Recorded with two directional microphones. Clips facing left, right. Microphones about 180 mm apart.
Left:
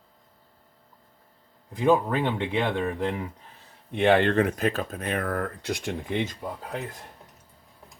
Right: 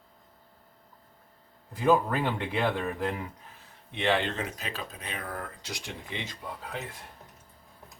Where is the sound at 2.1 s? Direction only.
20° left (ahead or behind).